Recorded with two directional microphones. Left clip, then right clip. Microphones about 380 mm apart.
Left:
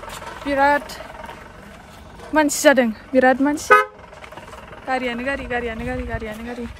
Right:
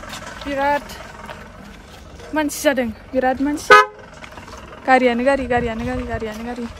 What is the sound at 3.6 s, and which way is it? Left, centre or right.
Speech, centre.